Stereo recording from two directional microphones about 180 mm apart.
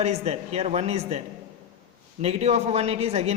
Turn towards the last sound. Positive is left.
turn(degrees=-35)  # may be behind; listen again after turning